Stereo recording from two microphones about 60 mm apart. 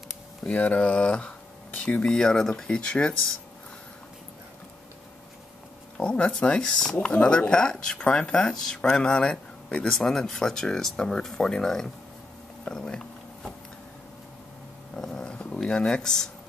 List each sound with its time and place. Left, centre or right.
0.4 s speech: centre
2.1 s speech: centre
5.9 s speech: centre
12.6 s a sound: centre
15.0 s dog: centre